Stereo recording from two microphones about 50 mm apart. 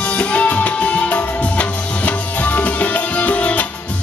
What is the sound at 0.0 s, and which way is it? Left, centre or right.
Music, left.